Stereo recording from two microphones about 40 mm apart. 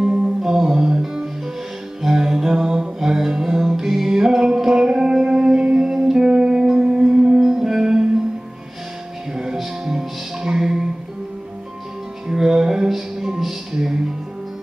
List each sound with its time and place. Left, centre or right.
0.0 s music: centre
9.3 s music: centre
12.3 s music: centre